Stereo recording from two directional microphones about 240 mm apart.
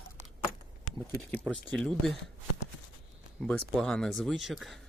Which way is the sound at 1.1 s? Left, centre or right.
Centre.